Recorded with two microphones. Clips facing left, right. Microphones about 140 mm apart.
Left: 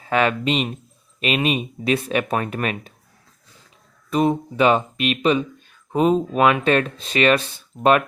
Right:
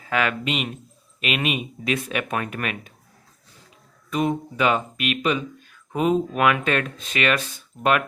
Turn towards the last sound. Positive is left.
turn(degrees=30)  # may be behind; listen again after turning